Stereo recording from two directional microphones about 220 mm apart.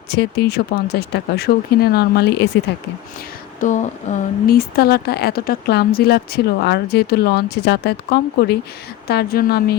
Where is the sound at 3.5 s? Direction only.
35° left (ahead or behind).